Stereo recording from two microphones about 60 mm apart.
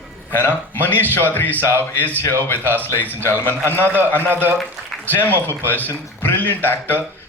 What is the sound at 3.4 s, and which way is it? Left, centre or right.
Speech, left.